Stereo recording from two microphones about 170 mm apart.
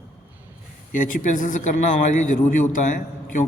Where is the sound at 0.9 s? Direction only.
50° left (ahead or behind).